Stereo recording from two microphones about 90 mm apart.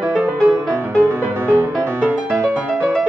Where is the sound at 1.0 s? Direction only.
25° right (ahead or behind).